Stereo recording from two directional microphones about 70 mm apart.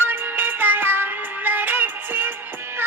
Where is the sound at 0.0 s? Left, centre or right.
Right.